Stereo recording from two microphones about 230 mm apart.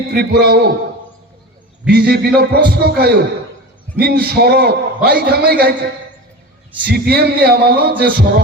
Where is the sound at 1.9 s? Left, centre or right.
Right.